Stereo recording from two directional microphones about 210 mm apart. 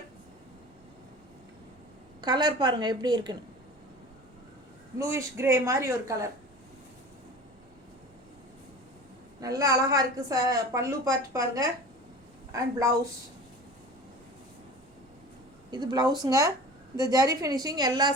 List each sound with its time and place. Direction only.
2.2 s a woman's voice: 20° right (ahead or behind)
4.9 s a woman's voice: 15° right (ahead or behind)
9.4 s a woman's voice: 15° right (ahead or behind)
15.7 s a woman's voice: 20° right (ahead or behind)